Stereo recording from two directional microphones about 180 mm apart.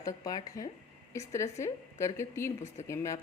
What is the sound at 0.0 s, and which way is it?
Speech, 20° left (ahead or behind).